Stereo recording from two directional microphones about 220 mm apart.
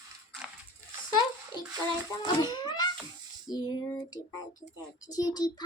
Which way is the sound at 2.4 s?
20° left (ahead or behind).